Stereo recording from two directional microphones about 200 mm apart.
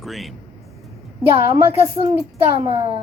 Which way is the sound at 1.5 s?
15° right (ahead or behind).